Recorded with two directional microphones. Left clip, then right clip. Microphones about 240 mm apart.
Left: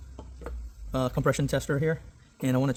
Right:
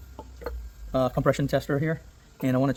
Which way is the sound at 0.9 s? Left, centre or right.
Left.